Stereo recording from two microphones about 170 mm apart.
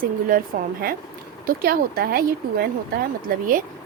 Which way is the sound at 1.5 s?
60° right (ahead or behind).